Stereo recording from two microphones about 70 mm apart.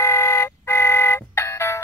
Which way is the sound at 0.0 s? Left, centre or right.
Left.